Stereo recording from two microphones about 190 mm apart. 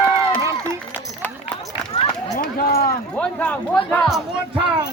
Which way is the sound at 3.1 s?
5° left (ahead or behind).